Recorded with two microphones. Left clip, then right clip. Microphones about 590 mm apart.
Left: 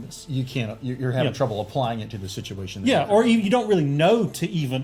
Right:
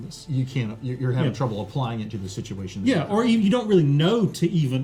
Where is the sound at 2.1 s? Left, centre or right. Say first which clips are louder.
Even; left.